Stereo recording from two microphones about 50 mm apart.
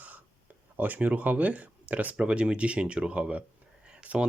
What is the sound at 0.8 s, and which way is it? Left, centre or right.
Speech, right.